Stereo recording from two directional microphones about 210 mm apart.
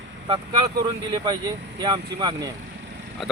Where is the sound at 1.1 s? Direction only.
20° right (ahead or behind).